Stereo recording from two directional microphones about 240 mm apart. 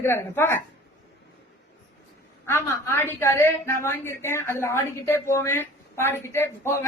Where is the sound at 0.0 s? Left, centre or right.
Centre.